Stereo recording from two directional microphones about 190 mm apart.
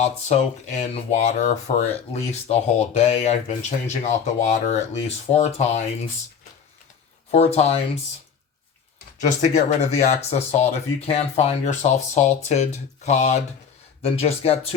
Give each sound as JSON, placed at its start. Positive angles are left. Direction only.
{"t": 0.0, "sound": "speech", "side_deg": 35}
{"t": 7.3, "sound": "speech", "side_deg": 35}
{"t": 9.2, "sound": "speech", "side_deg": 35}